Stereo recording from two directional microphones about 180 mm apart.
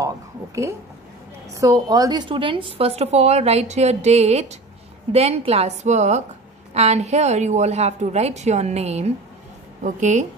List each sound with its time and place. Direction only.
1.5 s a woman's voice: 20° right (ahead or behind); by 10.2 s 40° right (ahead or behind)